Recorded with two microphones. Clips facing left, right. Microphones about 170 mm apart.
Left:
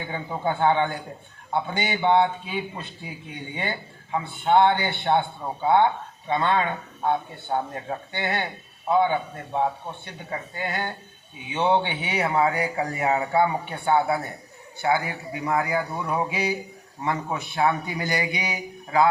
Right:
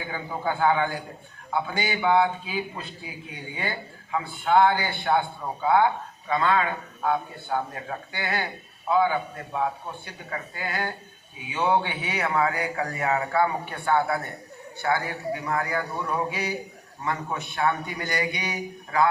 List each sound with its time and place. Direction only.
0.1 s speech: 25° left (ahead or behind)